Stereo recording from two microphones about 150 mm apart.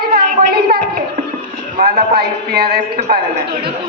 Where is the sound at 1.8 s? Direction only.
80° right.